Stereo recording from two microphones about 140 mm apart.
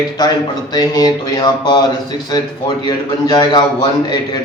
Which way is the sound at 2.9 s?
30° left (ahead or behind).